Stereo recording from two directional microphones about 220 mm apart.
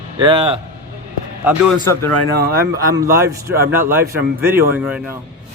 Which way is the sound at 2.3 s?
45° right (ahead or behind).